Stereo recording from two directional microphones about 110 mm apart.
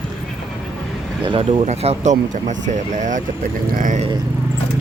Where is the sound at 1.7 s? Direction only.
90° right.